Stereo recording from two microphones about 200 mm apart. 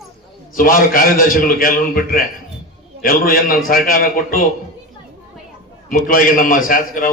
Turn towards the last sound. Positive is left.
turn(degrees=45)  # may be behind; listen again after turning